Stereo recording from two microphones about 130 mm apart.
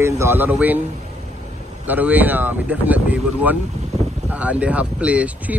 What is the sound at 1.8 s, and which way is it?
Speech, 15° right (ahead or behind).